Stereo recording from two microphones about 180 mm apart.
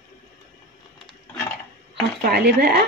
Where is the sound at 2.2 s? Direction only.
60° right (ahead or behind).